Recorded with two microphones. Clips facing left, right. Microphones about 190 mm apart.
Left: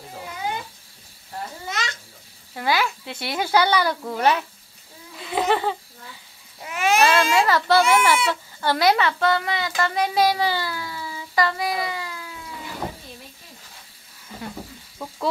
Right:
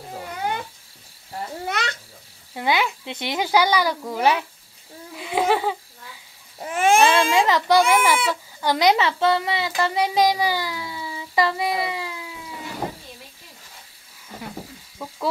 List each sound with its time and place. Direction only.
0.4 s cat: 60° right (ahead or behind)
1.7 s babbling: 60° right (ahead or behind)
2.5 s speech: 20° right (ahead or behind)
5.1 s a sound: 10° right (ahead or behind)
6.6 s babbling: 45° right (ahead or behind)
7.0 s speech: 20° right (ahead or behind)
12.1 s cat: 15° right (ahead or behind)
15.0 s insect: 10° right (ahead or behind)